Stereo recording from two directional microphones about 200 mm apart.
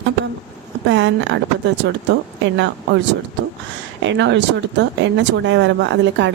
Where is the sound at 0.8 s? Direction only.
65° right (ahead or behind).